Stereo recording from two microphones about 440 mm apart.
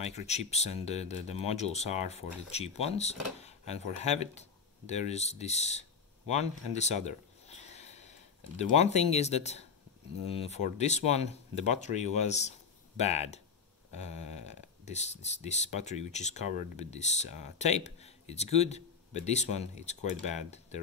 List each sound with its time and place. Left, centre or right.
0.0 s speech: centre
6.2 s a sound: centre
8.5 s speech: centre